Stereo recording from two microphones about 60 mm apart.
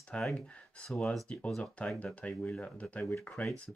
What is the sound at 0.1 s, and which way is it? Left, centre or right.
Speech, centre.